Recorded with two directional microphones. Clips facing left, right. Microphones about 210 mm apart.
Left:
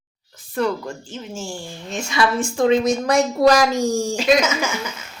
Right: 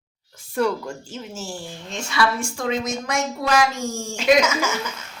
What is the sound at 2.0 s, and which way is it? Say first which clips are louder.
A woman's voice: left 3 dB; 20° left (ahead or behind).